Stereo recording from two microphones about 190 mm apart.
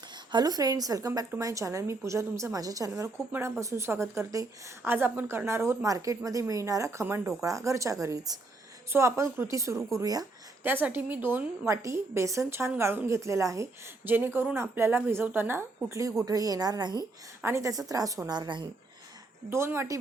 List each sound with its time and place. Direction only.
0.3 s a woman's voice: 20° right (ahead or behind)